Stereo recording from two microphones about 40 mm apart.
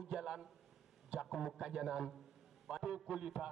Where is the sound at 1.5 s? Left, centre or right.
Centre.